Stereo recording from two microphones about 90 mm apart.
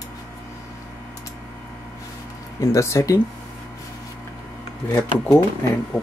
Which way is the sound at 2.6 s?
30° left (ahead or behind).